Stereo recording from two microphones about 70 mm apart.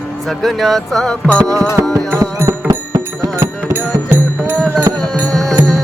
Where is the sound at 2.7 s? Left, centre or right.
Right.